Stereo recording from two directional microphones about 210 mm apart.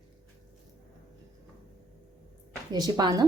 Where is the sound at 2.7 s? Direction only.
20° right (ahead or behind).